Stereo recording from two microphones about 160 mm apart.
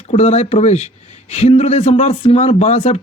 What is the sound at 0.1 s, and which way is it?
Speech, 45° left (ahead or behind).